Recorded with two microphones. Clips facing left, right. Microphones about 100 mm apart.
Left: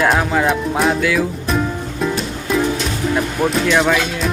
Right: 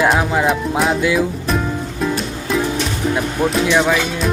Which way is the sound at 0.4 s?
Centre (ahead or behind).